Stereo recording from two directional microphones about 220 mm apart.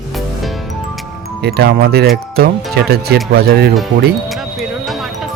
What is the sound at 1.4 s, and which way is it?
Speech, 45° right (ahead or behind).